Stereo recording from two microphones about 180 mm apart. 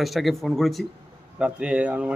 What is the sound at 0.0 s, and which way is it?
A man's voice, centre (ahead or behind).